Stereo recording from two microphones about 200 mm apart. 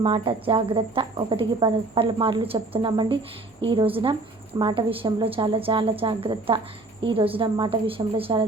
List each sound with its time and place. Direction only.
0.0 s speech: 25° right (ahead or behind)